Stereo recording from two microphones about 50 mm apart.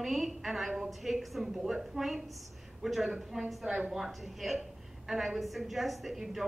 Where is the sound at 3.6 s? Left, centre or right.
Right.